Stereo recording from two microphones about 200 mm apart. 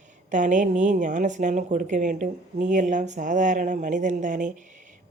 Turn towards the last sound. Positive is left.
turn(degrees=-40)  # may be behind; listen again after turning